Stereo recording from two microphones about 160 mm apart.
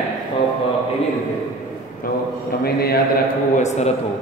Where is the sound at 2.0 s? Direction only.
65° left (ahead or behind).